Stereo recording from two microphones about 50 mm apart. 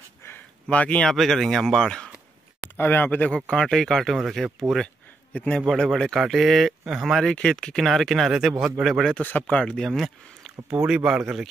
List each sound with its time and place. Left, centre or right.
0.7 s speech: left
1.1 s speech: centre
2.8 s speech: left
3.4 s speech: centre
5.3 s a man's voice: left
5.7 s speech: centre
7.4 s speech: centre
7.8 s speech: centre
9.2 s speech: left
9.6 s speech: centre
9.8 s speech: centre
10.7 s speech: right